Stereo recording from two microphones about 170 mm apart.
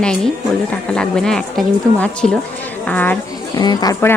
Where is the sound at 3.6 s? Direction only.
25° left (ahead or behind).